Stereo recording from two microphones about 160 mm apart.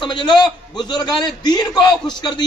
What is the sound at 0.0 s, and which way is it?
A man's voice, 30° left (ahead or behind).